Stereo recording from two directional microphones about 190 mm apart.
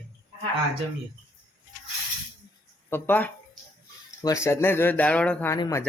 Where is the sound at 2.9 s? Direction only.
10° left (ahead or behind).